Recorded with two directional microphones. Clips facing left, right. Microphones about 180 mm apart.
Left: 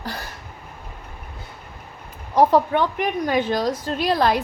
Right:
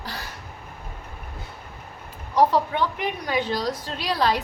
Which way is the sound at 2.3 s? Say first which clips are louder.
Left 4 dB; 50° left (ahead or behind).